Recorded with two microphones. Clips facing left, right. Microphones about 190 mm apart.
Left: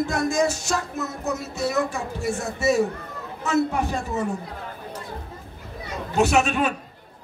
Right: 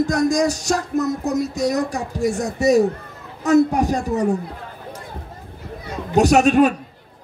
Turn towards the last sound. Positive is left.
turn(degrees=-40)  # may be behind; listen again after turning